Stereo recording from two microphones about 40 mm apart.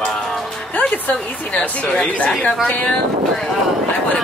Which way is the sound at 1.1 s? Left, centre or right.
Left.